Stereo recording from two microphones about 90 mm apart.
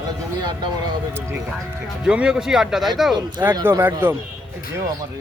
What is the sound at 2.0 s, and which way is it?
Speech, 10° right (ahead or behind).